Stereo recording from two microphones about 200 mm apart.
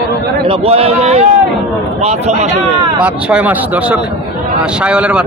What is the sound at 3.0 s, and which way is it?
Speech, 10° right (ahead or behind).